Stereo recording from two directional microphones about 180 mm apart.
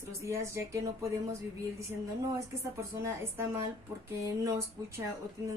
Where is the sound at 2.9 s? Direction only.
15° right (ahead or behind).